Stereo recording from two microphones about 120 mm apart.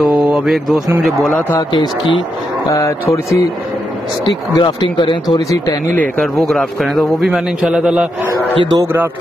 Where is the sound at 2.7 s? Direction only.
25° left (ahead or behind).